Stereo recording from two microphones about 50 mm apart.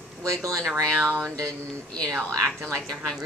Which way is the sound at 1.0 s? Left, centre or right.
Right.